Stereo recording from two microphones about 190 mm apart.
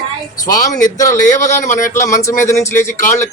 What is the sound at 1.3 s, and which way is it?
Speech, 40° left (ahead or behind).